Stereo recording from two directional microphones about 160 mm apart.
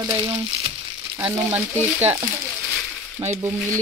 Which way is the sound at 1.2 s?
10° right (ahead or behind).